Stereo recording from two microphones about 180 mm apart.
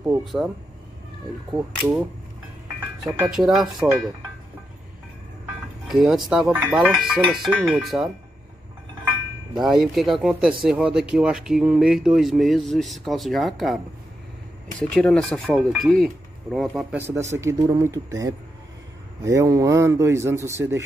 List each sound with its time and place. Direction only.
0.2 s speech: centre (ahead or behind)
1.5 s speech: centre (ahead or behind)
5.9 s speech: 5° right (ahead or behind)
9.6 s speech: centre (ahead or behind)
14.8 s speech: 5° left (ahead or behind)
17.0 s speech: 15° right (ahead or behind)